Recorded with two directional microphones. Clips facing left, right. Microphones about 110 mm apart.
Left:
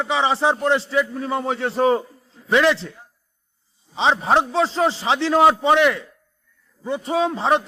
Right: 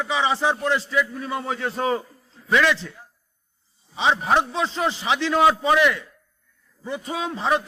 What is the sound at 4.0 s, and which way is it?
A man's voice, 30° left (ahead or behind).